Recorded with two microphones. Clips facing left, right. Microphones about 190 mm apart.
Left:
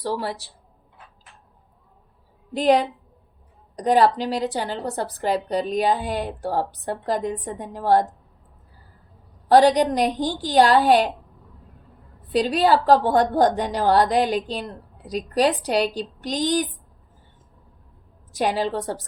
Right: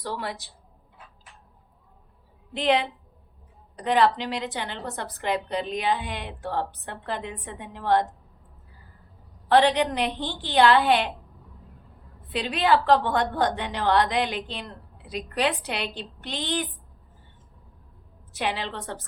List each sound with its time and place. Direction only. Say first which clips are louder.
0.0 s a woman's voice: left 6 dB; 35° left (ahead or behind)
2.5 s a woman's voice: left 5 dB; 40° left (ahead or behind)
9.5 s a woman's voice: left 5 dB; 40° left (ahead or behind)
12.3 s a woman's voice: left 4 dB; 40° left (ahead or behind)
18.3 s a woman's voice: left 7 dB; 40° left (ahead or behind)